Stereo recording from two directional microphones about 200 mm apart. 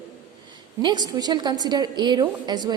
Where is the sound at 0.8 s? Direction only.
20° right (ahead or behind).